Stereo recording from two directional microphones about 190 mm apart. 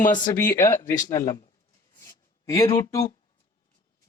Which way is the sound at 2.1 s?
15° left (ahead or behind).